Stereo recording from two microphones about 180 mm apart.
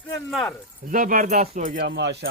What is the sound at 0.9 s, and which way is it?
Speech, 50° right (ahead or behind).